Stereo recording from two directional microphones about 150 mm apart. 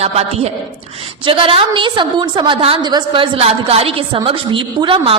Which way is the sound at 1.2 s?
35° right (ahead or behind).